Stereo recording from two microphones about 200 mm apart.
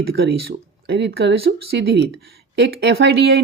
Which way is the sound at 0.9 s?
60° right (ahead or behind).